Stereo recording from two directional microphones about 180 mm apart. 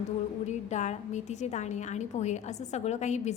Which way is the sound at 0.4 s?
40° left (ahead or behind).